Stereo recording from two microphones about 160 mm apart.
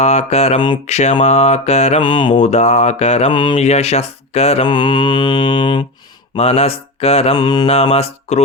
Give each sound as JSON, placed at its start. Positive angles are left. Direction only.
{"t": 0.0, "sound": "mantra", "side_deg": 45}
{"t": 2.0, "sound": "mantra", "side_deg": 30}
{"t": 2.3, "sound": "mantra", "side_deg": 45}
{"t": 3.3, "sound": "mantra", "side_deg": 30}
{"t": 3.6, "sound": "mantra", "side_deg": 45}
{"t": 6.3, "sound": "mantra", "side_deg": 45}
{"t": 7.3, "sound": "mantra", "side_deg": 25}
{"t": 7.7, "sound": "mantra", "side_deg": 40}